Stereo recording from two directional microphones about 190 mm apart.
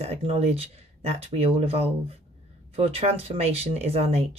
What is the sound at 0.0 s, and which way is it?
Speech, 30° right (ahead or behind).